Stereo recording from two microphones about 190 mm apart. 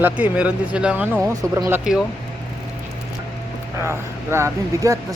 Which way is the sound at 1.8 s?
5° right (ahead or behind).